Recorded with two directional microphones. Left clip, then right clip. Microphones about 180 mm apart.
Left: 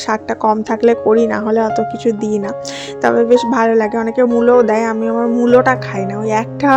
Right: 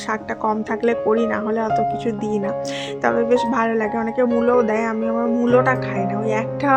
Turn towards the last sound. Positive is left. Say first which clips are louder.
# left 5 dB
turn(degrees=30)  # may be behind; listen again after turning